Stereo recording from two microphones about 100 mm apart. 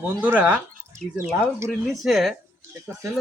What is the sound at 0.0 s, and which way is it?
Speech, 20° right (ahead or behind).